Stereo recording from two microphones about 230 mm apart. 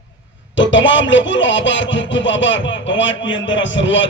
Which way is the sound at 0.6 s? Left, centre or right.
Left.